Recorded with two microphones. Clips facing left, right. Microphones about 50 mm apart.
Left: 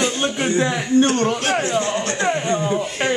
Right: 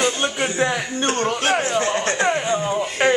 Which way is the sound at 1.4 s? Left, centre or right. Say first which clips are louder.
Even; right.